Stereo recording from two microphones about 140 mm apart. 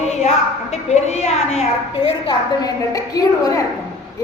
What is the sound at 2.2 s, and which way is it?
A woman's voice, 25° left (ahead or behind).